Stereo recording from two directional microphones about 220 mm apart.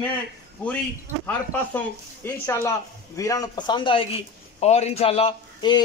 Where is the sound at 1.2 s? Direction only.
10° left (ahead or behind).